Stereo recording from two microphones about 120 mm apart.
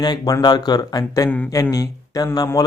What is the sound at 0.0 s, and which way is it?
Speech, 35° left (ahead or behind).